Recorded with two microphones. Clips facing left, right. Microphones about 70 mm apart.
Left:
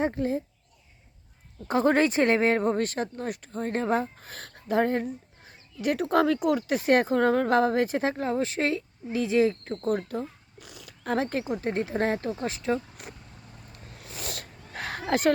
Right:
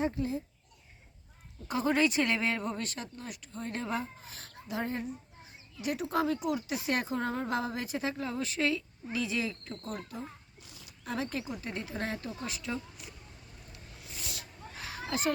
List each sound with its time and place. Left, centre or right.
0.0 s speech: left
1.6 s speech: left
10.7 s wild animals: left
11.0 s speech: left
13.7 s a sound: left